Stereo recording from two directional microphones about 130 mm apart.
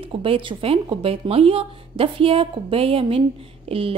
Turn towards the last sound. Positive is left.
turn(degrees=-45)  # may be behind; listen again after turning